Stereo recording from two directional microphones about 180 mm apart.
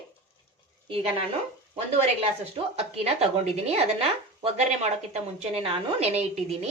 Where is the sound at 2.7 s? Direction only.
35° right (ahead or behind).